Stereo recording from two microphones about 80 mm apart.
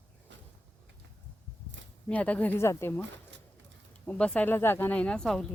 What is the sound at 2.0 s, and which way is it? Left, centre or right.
Speech, centre.